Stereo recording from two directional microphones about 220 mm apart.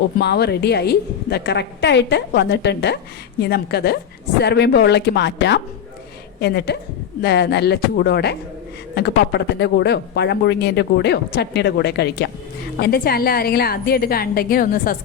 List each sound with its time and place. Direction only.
0.2 s speech: 50° left (ahead or behind)